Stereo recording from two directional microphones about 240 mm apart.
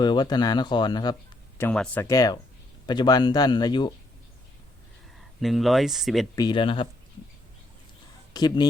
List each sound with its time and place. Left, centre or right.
0.0 s speech: centre
1.5 s speech: centre
5.4 s speech: centre
6.3 s speech: centre
8.3 s speech: centre